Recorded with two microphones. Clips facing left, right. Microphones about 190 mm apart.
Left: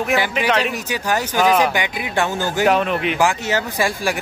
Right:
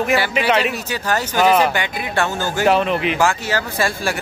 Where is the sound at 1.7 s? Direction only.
15° left (ahead or behind).